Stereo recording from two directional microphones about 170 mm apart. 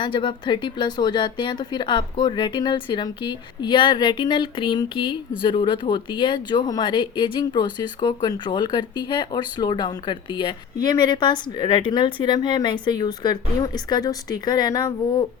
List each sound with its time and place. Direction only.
0.0 s a woman's voice: 30° left (ahead or behind)